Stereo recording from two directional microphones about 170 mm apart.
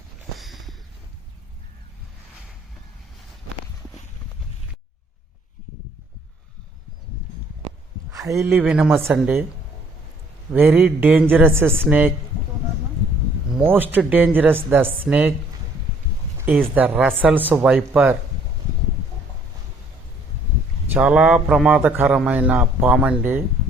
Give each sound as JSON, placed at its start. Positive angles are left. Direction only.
{"t": 0.3, "sound": "a sound", "side_deg": 0}
{"t": 8.4, "sound": "a man's voice", "side_deg": -10}
{"t": 10.5, "sound": "a man's voice", "side_deg": -10}
{"t": 13.6, "sound": "a man's voice", "side_deg": -10}
{"t": 16.4, "sound": "a man's voice", "side_deg": -10}
{"t": 20.9, "sound": "a man's voice", "side_deg": -10}